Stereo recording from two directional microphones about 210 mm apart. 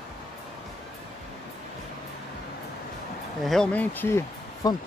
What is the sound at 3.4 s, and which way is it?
Speech, centre (ahead or behind).